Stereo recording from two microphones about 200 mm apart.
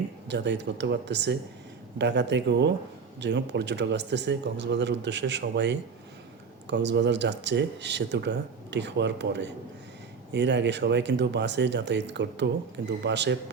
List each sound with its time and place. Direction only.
0.3 s speech: 60° right (ahead or behind)